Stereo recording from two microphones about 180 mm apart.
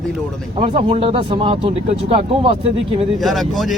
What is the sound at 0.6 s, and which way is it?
Speech, 30° right (ahead or behind).